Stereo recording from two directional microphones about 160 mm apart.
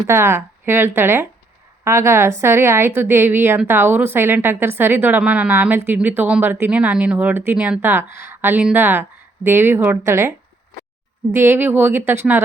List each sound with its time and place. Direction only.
0.1 s a woman's voice: 15° right (ahead or behind)